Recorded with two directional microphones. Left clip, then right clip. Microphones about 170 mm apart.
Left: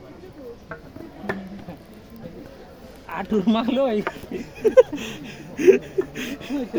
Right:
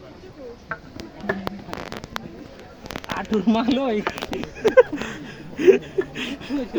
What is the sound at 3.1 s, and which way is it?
Speech, 30° left (ahead or behind).